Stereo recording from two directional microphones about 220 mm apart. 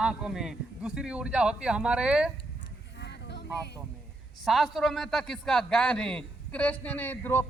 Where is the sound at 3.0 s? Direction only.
50° left (ahead or behind).